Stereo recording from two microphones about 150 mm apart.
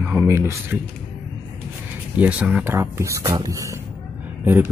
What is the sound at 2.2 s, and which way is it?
Speech, 10° right (ahead or behind).